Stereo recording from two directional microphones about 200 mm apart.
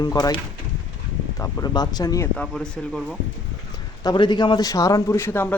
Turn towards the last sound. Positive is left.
turn(degrees=10)  # may be behind; listen again after turning